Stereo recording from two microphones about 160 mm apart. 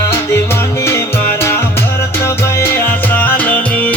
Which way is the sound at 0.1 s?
15° left (ahead or behind).